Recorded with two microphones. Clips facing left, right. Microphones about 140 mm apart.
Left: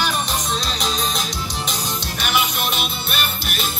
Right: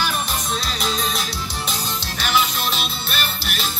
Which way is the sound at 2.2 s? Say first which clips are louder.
Right 1 dB; 10° left (ahead or behind).